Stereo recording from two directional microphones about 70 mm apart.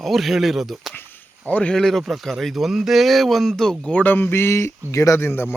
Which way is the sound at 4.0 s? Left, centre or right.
Left.